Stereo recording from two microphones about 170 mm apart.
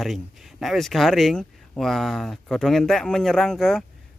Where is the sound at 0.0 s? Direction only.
Centre (ahead or behind).